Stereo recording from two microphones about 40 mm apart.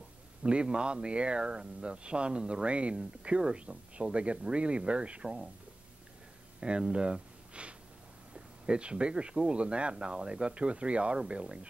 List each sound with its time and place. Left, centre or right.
0.4 s speech: right
6.6 s speech: right